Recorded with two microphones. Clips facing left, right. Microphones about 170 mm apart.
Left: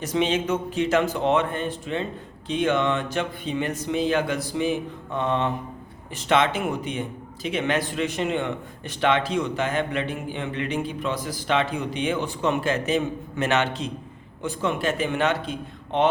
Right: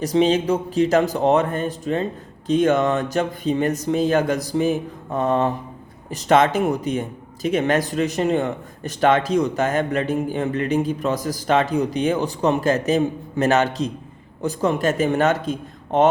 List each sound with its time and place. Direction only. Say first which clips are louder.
0.0 s a man's voice: right 6 dB; 35° right (ahead or behind)